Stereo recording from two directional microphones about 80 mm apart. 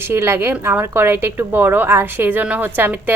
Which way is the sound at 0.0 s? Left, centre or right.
Right.